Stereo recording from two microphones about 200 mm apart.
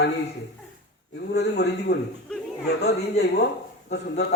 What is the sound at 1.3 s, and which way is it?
A man's voice, 55° left (ahead or behind).